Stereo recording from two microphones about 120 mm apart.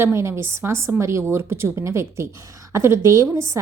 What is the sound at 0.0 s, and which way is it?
A woman's voice, 20° right (ahead or behind).